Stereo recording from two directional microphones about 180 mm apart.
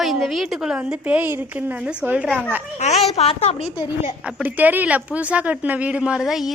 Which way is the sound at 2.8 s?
40° left (ahead or behind).